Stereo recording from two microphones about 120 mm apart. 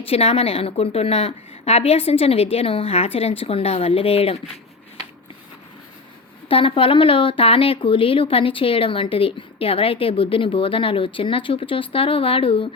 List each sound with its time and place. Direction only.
0.0 s a woman's voice: 55° left (ahead or behind)
6.5 s speech: 50° left (ahead or behind)